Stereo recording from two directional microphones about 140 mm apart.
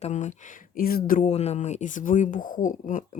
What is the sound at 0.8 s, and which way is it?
Speech, 90° left.